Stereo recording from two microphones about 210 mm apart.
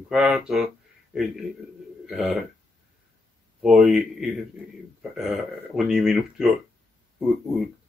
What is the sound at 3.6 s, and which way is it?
Speech, centre (ahead or behind).